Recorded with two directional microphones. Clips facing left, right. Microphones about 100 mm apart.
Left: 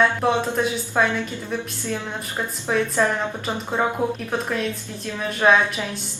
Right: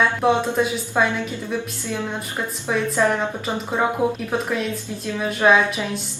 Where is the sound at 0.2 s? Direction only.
5° right (ahead or behind).